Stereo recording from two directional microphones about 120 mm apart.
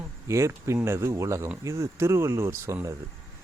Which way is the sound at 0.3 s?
25° right (ahead or behind).